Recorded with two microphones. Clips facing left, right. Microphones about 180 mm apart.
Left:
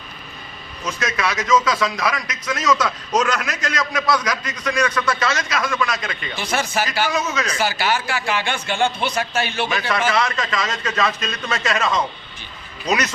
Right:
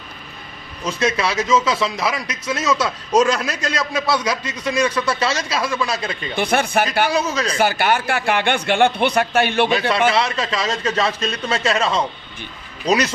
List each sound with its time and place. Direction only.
0.9 s a man's voice: 30° right (ahead or behind)
6.3 s speech: 55° right (ahead or behind)
7.1 s a man's voice: 35° right (ahead or behind)
7.6 s speech: 55° right (ahead or behind)
10.1 s a man's voice: 30° right (ahead or behind)